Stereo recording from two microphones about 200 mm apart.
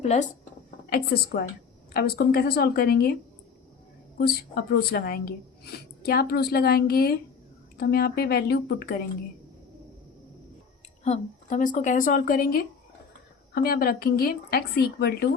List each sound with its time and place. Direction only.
0.0 s speech: 35° left (ahead or behind)
0.9 s a woman's voice: 50° left (ahead or behind)
4.2 s a woman's voice: 50° left (ahead or behind)
11.0 s a woman's voice: 35° left (ahead or behind); by 15.3 s 50° left (ahead or behind)